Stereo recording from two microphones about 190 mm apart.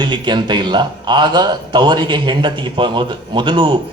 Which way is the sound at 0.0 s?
25° right (ahead or behind).